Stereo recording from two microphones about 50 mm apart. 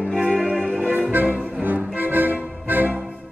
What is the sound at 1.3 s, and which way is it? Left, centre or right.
Music, centre.